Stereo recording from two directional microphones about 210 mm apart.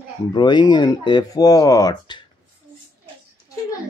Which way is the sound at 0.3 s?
20° left (ahead or behind).